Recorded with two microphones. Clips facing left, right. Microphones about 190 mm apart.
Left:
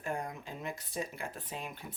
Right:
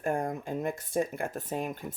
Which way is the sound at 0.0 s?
50° right (ahead or behind).